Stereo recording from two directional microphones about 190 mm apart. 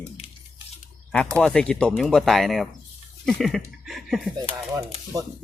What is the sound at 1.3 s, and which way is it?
Speech, 5° left (ahead or behind).